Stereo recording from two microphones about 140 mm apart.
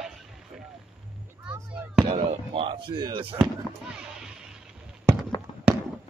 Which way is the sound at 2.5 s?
40° right (ahead or behind).